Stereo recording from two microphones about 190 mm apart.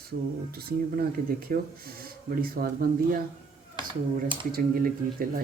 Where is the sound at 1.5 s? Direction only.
50° right (ahead or behind).